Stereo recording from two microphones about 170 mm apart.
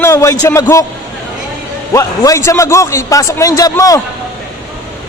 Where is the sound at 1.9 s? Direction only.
20° left (ahead or behind).